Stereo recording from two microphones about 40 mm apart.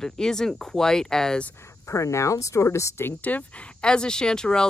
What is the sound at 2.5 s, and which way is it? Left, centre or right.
Speech, left.